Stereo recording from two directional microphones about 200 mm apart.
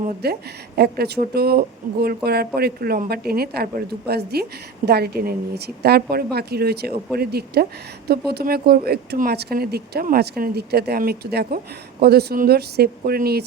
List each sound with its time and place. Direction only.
0.2 s speech: 55° right (ahead or behind)